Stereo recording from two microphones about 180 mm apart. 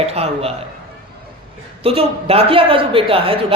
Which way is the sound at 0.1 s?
35° right (ahead or behind).